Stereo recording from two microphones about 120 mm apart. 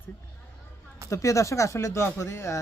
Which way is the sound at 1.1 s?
25° left (ahead or behind).